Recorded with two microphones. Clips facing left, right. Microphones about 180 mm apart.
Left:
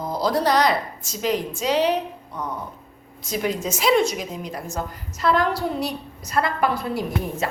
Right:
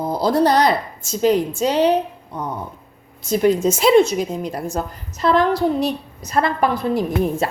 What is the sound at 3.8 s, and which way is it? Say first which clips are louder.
Speech: right 4 dB; 30° right (ahead or behind).